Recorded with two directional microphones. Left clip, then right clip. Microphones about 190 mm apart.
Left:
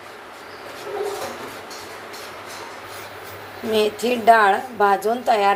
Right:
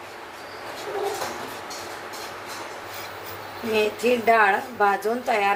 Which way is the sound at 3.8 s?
20° left (ahead or behind).